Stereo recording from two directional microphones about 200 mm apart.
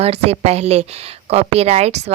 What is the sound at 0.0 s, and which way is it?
Speech, 30° right (ahead or behind).